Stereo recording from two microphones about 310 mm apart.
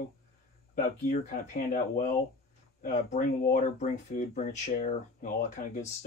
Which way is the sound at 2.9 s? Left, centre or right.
Left.